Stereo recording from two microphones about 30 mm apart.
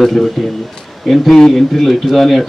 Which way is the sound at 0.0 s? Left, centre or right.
Centre.